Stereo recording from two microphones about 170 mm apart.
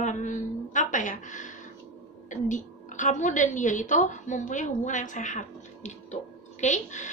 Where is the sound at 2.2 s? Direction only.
45° left (ahead or behind).